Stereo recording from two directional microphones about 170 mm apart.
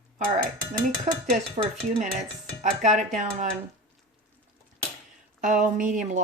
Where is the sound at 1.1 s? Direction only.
40° right (ahead or behind).